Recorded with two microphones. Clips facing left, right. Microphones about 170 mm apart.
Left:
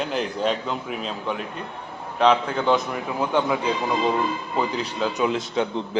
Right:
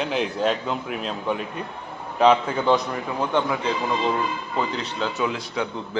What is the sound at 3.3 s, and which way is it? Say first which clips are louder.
Speech: left 2 dB; 10° left (ahead or behind).